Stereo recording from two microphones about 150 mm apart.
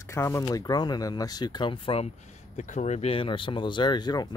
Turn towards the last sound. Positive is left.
turn(degrees=30)  # may be behind; listen again after turning